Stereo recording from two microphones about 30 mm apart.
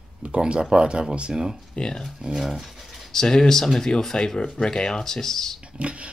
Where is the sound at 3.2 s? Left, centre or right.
Left.